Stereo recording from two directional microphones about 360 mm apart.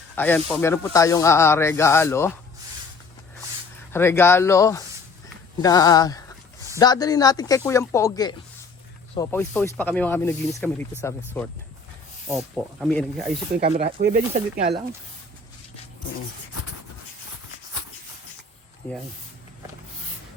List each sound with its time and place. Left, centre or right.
0.2 s speech: centre
3.9 s speech: centre
11.3 s speech: centre
12.8 s speech: centre
13.6 s speech: centre